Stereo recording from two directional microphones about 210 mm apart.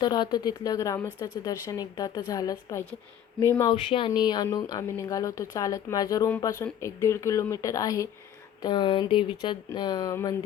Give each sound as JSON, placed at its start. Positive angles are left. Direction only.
{"t": 0.0, "sound": "speech", "side_deg": 20}